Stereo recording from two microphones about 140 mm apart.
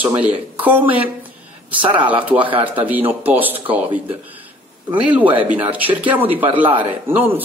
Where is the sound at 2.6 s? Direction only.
10° right (ahead or behind).